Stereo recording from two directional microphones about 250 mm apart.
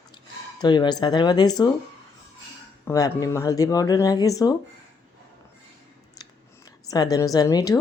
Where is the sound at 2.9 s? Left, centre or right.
Centre.